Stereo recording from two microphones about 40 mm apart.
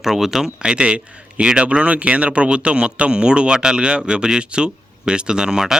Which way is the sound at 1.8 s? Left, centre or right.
Right.